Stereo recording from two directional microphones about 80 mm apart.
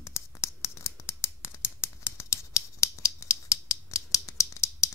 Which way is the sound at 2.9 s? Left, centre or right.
Left.